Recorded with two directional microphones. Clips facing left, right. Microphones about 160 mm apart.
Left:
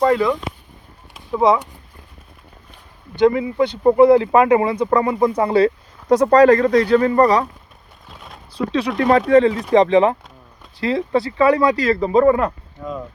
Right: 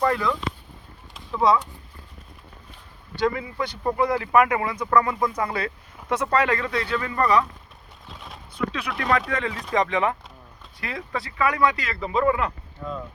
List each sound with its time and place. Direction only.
0.1 s speech: 20° left (ahead or behind)
1.4 s speech: 20° left (ahead or behind)
3.2 s speech: 20° left (ahead or behind); by 7.4 s 35° left (ahead or behind)
8.5 s speech: 35° left (ahead or behind)